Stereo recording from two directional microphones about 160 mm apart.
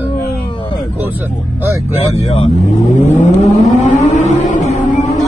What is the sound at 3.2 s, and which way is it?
Vehicle, 45° right (ahead or behind).